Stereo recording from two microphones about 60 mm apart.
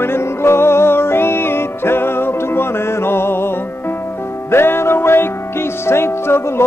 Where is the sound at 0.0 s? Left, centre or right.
Left.